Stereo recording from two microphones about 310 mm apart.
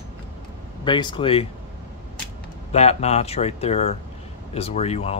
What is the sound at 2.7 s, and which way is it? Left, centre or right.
Speech, centre.